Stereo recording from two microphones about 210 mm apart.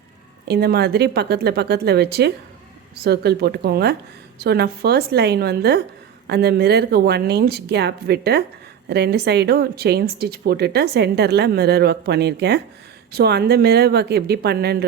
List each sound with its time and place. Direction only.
0.4 s speech: 50° right (ahead or behind)